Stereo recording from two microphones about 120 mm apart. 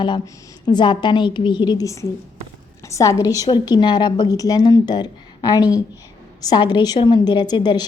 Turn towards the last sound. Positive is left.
turn(degrees=35)  # may be behind; listen again after turning